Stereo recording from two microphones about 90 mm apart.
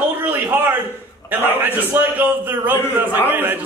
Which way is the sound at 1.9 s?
20° right (ahead or behind).